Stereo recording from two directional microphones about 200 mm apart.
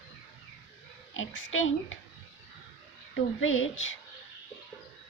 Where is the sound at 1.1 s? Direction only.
75° left (ahead or behind).